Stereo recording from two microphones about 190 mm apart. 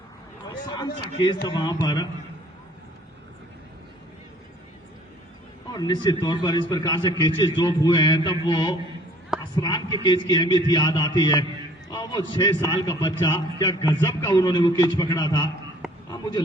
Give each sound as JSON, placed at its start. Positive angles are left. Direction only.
{"t": 0.7, "sound": "a man's voice", "side_deg": 25}
{"t": 5.7, "sound": "a man's voice", "side_deg": 20}
{"t": 16.0, "sound": "a sound", "side_deg": 20}